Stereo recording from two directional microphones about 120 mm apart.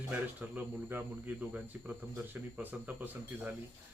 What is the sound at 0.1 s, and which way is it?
Speech, 15° right (ahead or behind).